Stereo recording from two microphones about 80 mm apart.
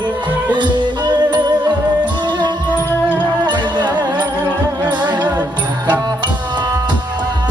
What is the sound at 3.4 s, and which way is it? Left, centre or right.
Music, right.